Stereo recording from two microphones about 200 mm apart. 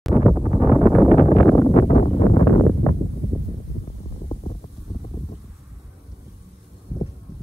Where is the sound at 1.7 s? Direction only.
30° left (ahead or behind).